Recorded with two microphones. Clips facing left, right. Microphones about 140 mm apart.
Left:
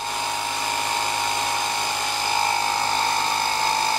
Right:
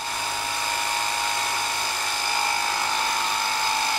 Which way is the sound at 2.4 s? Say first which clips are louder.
Left 3 dB; 20° left (ahead or behind).